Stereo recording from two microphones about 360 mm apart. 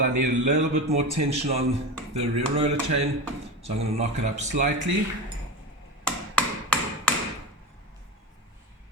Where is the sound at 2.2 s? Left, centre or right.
Right.